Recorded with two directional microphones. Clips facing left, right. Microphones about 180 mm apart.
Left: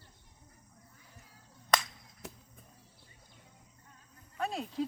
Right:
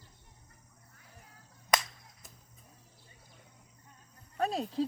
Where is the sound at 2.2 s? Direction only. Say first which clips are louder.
Left 14 dB; 70° left (ahead or behind).